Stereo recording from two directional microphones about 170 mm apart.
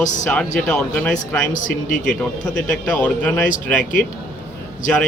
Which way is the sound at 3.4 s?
50° left (ahead or behind).